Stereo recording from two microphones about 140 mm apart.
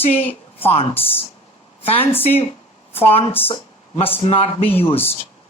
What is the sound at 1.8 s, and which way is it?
Speech, 45° left (ahead or behind).